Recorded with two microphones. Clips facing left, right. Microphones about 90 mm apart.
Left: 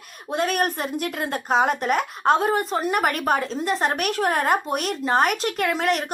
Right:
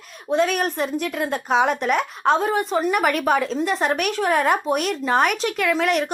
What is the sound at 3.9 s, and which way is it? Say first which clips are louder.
A woman's voice: right 2 dB; 40° left (ahead or behind).